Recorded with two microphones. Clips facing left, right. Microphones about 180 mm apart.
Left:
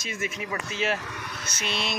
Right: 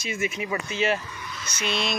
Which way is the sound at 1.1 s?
65° left (ahead or behind).